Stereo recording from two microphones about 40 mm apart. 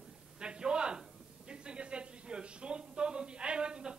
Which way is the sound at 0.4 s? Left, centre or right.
Right.